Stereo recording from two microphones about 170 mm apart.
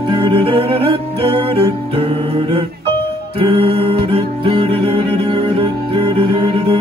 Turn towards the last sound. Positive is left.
turn(degrees=-30)  # may be behind; listen again after turning